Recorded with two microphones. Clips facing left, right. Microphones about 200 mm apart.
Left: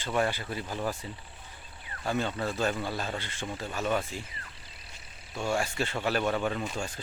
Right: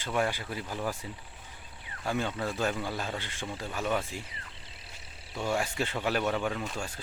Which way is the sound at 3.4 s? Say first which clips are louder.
Left 2 dB; 5° left (ahead or behind).